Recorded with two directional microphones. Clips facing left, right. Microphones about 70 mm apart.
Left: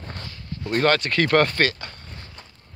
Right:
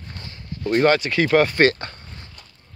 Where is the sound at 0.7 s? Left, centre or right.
Centre.